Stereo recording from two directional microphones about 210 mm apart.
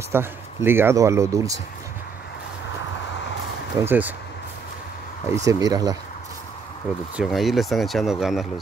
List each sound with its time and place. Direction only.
0.1 s speech: 10° right (ahead or behind)
3.8 s speech: 10° right (ahead or behind)
5.3 s speech: 15° right (ahead or behind)
7.2 s speech: centre (ahead or behind)